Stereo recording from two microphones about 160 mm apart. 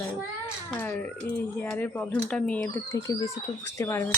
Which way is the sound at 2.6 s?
15° left (ahead or behind).